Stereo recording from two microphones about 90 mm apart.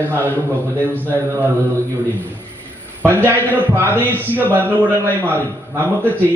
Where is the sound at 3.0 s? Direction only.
20° right (ahead or behind).